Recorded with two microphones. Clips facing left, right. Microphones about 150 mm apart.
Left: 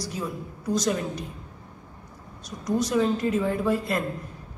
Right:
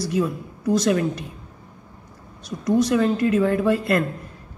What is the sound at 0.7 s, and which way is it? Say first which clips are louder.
Speech: right 6 dB; 60° right (ahead or behind).